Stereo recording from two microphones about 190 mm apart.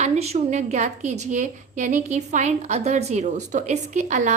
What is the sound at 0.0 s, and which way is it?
A woman's voice, 35° right (ahead or behind).